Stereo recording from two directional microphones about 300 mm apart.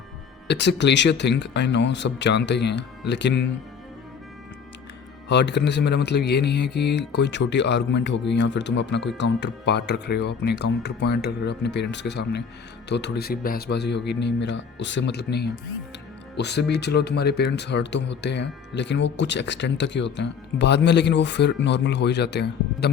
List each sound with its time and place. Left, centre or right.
0.4 s speech: left
5.3 s speech: left